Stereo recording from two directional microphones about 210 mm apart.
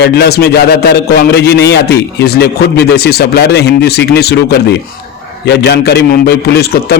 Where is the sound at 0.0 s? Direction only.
50° left (ahead or behind).